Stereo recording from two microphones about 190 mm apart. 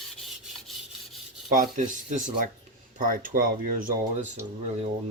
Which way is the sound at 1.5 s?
45° right (ahead or behind).